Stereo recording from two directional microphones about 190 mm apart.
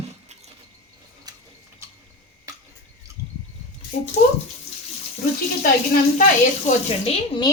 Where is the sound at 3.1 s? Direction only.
15° right (ahead or behind).